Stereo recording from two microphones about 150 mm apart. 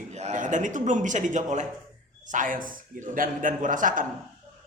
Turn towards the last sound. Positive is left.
turn(degrees=-60)  # may be behind; listen again after turning